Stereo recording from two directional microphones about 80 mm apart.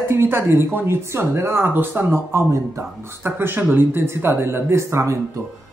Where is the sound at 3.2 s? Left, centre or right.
Right.